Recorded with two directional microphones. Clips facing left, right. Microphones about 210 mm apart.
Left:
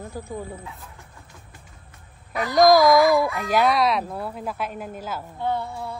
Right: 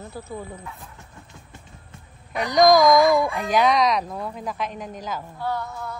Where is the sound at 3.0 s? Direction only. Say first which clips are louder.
Even; 20° right (ahead or behind).